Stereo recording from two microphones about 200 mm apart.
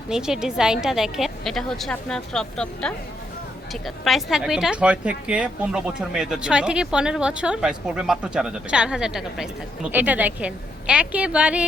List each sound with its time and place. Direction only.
0.1 s a woman's voice: 5° right (ahead or behind)